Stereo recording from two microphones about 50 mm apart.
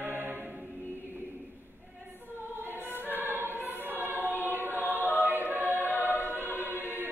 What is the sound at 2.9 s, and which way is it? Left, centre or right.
Choir, right.